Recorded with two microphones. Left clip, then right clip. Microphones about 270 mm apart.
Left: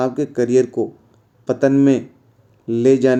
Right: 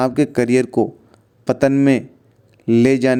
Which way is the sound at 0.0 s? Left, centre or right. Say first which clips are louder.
Right 2 dB; right.